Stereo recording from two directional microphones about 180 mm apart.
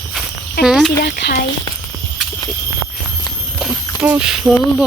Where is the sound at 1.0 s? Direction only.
65° left (ahead or behind).